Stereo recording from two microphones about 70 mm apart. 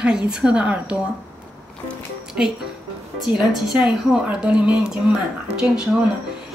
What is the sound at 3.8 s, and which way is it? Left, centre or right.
A woman's voice, centre.